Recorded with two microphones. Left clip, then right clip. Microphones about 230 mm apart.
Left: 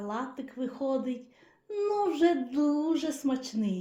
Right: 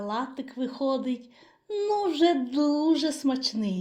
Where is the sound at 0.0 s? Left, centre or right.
Right.